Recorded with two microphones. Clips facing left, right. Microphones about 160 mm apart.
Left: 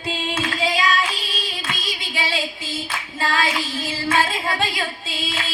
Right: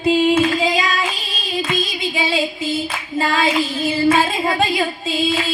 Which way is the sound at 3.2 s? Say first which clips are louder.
Right 4 dB; 25° right (ahead or behind).